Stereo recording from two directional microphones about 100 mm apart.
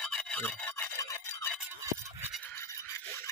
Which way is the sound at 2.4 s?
25° left (ahead or behind).